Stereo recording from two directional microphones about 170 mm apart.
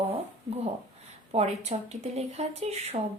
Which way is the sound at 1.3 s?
40° right (ahead or behind).